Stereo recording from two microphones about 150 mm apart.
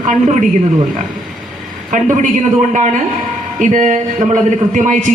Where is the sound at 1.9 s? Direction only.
60° right (ahead or behind).